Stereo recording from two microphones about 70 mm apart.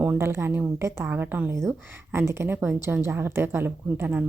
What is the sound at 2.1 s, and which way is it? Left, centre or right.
A woman's voice, right.